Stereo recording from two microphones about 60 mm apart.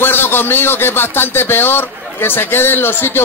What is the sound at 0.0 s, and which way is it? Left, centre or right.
A man's voice, left.